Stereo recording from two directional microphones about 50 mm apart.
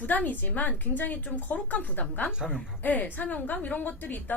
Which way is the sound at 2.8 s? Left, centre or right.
Left.